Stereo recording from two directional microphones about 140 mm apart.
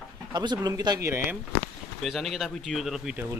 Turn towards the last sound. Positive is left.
turn(degrees=0)  # may be behind; listen again after turning